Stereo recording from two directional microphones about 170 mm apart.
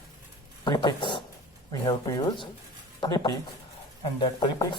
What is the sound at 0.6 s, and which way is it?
Speech, 25° left (ahead or behind).